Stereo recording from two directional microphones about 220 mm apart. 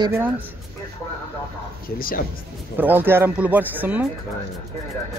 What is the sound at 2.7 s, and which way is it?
Speech, 10° right (ahead or behind).